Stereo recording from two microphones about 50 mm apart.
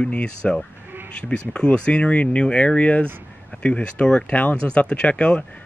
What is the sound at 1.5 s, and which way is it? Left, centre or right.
Speech, centre.